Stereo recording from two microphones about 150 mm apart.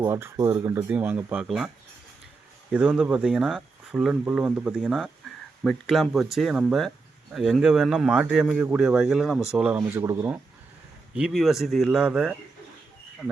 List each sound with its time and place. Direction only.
0.0 s speech: 20° right (ahead or behind)
2.7 s speech: 5° right (ahead or behind)
11.1 s speech: 5° right (ahead or behind)